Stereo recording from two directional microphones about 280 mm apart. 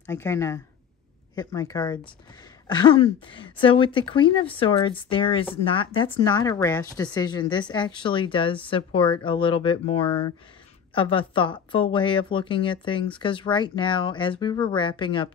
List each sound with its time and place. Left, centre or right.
0.0 s speech: centre